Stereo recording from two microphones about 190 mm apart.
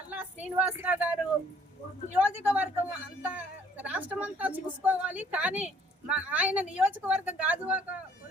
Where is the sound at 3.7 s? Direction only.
10° right (ahead or behind).